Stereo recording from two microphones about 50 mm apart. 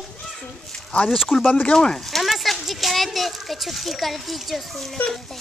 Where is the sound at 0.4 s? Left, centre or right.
Centre.